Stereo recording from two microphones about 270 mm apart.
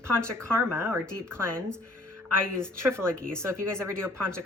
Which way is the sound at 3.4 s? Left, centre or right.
Centre.